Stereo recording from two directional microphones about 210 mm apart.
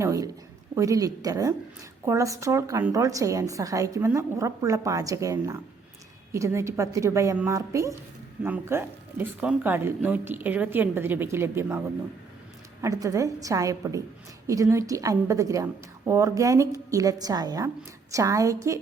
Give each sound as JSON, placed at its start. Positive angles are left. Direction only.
{"t": 0.0, "sound": "a sound", "side_deg": -15}
{"t": 0.8, "sound": "a woman's voice", "side_deg": -15}
{"t": 12.8, "sound": "a woman's voice", "side_deg": -15}